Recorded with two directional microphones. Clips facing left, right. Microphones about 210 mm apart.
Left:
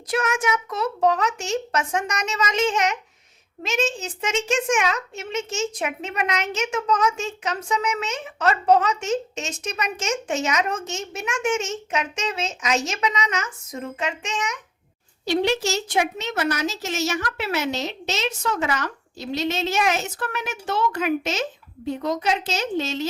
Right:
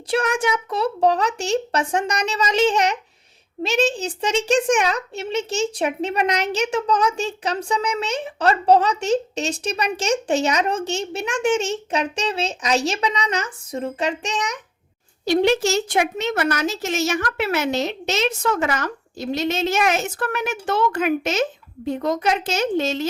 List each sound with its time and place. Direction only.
0.1 s a child's voice: 30° right (ahead or behind)
15.2 s a woman's voice: 50° right (ahead or behind)